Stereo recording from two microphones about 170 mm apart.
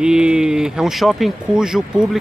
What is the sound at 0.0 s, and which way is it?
Speech, 5° right (ahead or behind).